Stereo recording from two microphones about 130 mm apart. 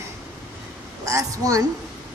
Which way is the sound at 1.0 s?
25° right (ahead or behind).